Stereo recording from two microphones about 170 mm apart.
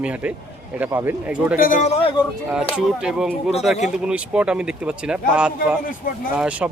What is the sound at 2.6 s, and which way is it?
Speech, centre (ahead or behind).